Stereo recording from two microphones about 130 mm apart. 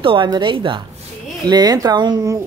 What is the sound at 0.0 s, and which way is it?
Speech, 40° right (ahead or behind).